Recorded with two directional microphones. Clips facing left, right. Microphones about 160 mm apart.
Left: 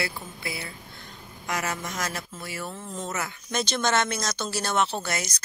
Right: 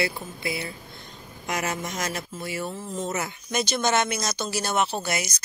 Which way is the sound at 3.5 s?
10° right (ahead or behind).